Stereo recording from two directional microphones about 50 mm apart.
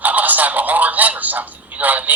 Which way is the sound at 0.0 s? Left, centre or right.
Right.